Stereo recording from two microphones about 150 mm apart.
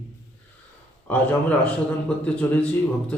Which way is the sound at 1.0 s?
10° left (ahead or behind).